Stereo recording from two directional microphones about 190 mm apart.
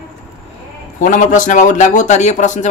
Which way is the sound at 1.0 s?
45° left (ahead or behind).